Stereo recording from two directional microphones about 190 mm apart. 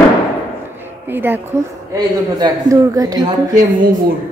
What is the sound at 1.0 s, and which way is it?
A woman's voice, 10° right (ahead or behind).